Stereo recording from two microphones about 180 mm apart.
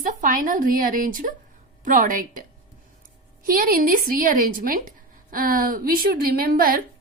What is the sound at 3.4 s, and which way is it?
A woman's voice, 50° right (ahead or behind).